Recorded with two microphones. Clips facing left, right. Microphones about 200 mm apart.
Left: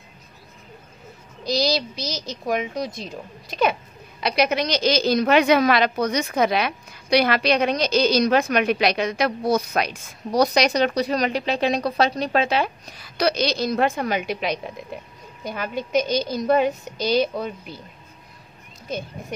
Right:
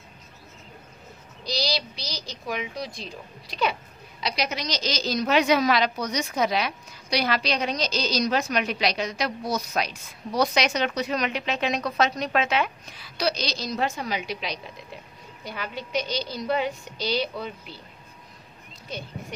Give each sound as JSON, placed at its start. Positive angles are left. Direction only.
{"t": 1.4, "sound": "a woman's voice", "side_deg": 45}